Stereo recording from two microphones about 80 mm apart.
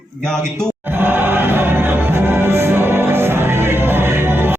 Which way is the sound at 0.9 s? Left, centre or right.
Right.